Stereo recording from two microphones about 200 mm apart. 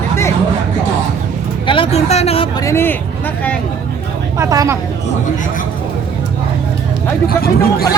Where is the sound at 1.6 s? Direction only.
25° left (ahead or behind).